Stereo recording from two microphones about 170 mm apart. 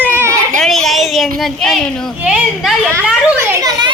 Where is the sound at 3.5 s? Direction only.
20° right (ahead or behind).